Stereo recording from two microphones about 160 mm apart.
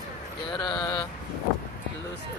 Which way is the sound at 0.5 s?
25° left (ahead or behind).